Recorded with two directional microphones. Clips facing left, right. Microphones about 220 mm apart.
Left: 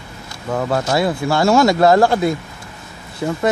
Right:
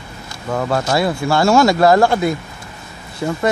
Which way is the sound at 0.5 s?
20° left (ahead or behind).